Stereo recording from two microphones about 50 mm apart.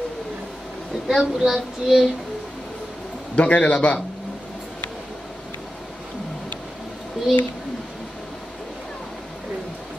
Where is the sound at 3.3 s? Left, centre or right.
Left.